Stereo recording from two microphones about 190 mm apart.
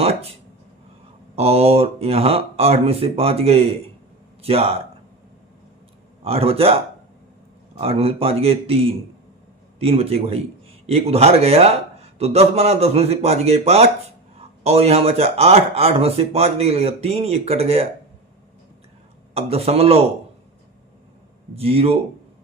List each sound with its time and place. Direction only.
0.0 s a sound: 30° right (ahead or behind)
1.4 s speech: 30° right (ahead or behind)
6.2 s speech: 30° right (ahead or behind)
19.3 s speech: 30° right (ahead or behind)
21.5 s speech: 30° right (ahead or behind)